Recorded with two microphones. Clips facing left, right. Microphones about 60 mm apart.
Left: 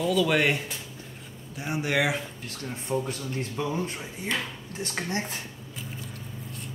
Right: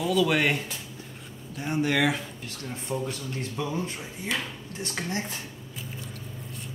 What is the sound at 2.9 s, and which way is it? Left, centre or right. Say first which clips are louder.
Speech: left 2 dB; left.